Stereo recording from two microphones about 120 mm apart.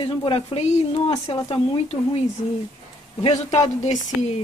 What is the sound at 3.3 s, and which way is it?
Speech, 75° left (ahead or behind).